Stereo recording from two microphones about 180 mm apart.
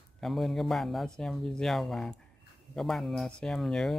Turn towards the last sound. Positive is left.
turn(degrees=0)  # may be behind; listen again after turning